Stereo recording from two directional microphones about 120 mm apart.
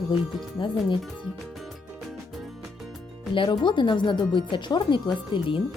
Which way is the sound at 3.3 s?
45° left (ahead or behind).